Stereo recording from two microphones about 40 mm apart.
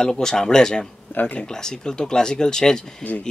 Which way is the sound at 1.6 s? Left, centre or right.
Centre.